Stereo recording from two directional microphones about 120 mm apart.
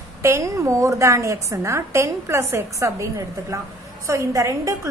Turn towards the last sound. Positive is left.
turn(degrees=-25)  # may be behind; listen again after turning